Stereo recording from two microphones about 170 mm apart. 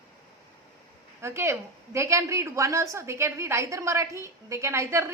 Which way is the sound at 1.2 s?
15° right (ahead or behind).